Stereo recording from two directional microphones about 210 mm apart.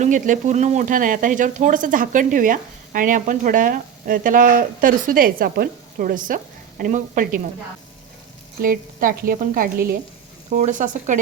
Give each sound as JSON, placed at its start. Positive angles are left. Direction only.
{"t": 0.0, "sound": "speech", "side_deg": -35}
{"t": 8.6, "sound": "a woman's voice", "side_deg": -40}